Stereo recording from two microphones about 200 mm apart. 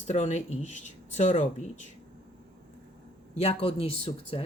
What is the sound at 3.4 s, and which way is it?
Speech, 30° left (ahead or behind).